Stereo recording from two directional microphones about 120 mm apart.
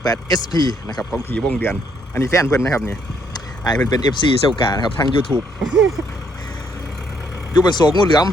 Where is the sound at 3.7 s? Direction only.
35° left (ahead or behind).